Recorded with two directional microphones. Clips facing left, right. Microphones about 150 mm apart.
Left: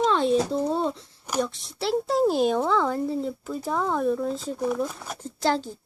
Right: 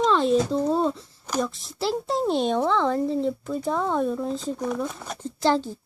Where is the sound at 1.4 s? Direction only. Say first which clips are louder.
Right 1 dB; centre (ahead or behind).